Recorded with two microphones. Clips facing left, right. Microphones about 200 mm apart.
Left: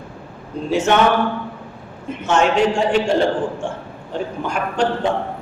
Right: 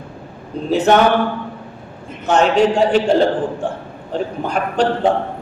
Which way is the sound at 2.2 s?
35° right (ahead or behind).